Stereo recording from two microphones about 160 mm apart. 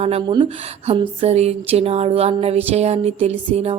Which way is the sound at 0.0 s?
35° right (ahead or behind).